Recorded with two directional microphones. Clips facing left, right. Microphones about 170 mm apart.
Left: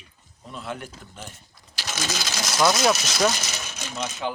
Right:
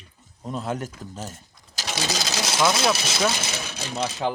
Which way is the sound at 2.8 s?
5° right (ahead or behind).